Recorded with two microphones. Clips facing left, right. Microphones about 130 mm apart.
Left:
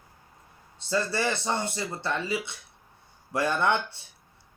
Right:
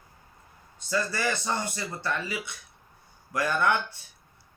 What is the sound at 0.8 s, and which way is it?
Speech, 30° left (ahead or behind).